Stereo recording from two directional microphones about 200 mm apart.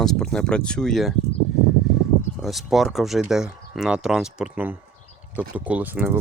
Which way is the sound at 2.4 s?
Centre (ahead or behind).